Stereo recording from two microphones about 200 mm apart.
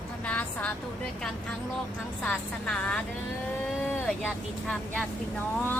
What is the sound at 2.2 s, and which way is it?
Speech, 5° left (ahead or behind).